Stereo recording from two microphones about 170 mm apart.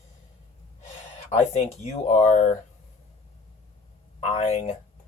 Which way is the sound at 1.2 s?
40° left (ahead or behind).